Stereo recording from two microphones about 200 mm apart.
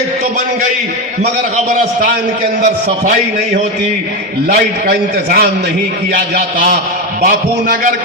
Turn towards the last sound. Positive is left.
turn(degrees=-40)  # may be behind; listen again after turning